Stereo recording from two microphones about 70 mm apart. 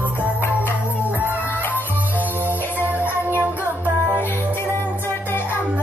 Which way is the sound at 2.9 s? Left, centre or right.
Left.